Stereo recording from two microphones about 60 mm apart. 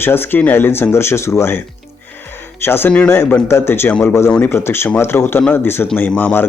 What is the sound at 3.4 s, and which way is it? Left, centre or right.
Speech, left.